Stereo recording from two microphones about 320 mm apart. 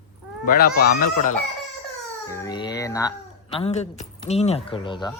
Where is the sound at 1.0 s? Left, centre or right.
Left.